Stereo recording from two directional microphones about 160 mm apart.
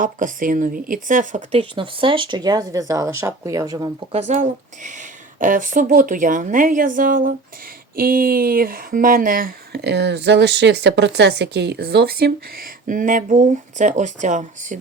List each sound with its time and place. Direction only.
0.0 s speech: 55° right (ahead or behind)
1.5 s speech: 35° right (ahead or behind)
4.1 s speech: 45° right (ahead or behind)